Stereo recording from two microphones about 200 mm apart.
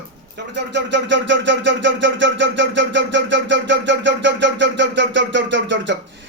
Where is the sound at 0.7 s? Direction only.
65° right (ahead or behind).